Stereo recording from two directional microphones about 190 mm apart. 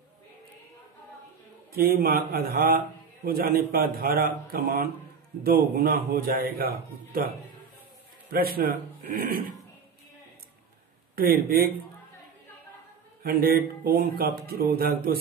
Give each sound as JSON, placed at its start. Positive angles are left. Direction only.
{"t": 1.7, "sound": "a man's voice", "side_deg": -50}
{"t": 11.1, "sound": "a man's voice", "side_deg": -50}
{"t": 13.2, "sound": "a man's voice", "side_deg": -50}